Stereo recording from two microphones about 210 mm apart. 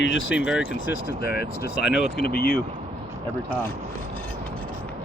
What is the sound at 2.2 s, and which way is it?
Speech, 45° left (ahead or behind).